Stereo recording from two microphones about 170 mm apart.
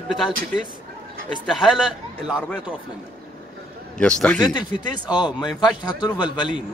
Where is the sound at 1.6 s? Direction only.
Centre (ahead or behind).